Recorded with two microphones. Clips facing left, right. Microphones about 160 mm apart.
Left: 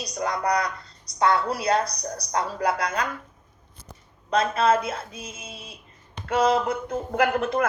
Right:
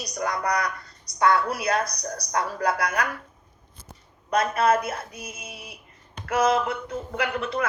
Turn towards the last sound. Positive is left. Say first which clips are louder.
# left 5 dB
turn(degrees=50)  # may be behind; listen again after turning